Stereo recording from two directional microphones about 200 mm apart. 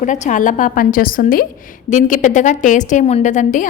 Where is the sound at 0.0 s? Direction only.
40° left (ahead or behind).